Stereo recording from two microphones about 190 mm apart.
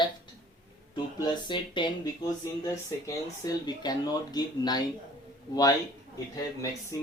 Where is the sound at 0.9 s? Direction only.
25° left (ahead or behind).